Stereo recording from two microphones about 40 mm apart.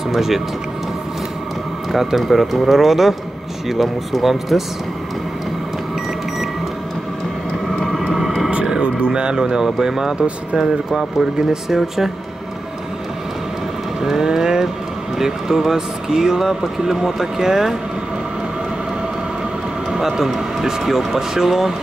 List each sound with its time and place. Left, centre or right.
0.1 s speech: centre
2.1 s speech: centre
7.8 s vehicle: centre
9.0 s speech: right
14.0 s vehicle: centre
15.1 s speech: centre
19.9 s speech: centre